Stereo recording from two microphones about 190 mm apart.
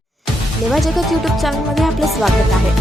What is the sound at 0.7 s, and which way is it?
Speech, centre (ahead or behind).